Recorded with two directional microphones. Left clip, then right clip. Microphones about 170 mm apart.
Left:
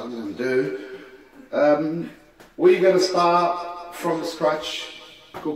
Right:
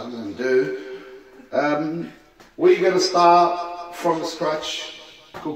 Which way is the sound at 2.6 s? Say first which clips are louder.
Even; 30° right (ahead or behind).